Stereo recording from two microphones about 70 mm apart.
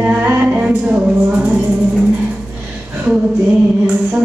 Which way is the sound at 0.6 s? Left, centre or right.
Centre.